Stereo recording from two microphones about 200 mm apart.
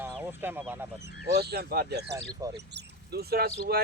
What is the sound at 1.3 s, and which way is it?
Speech, 55° right (ahead or behind).